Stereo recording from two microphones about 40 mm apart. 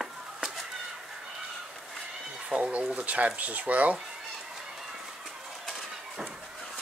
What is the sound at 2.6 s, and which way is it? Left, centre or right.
Speech, right.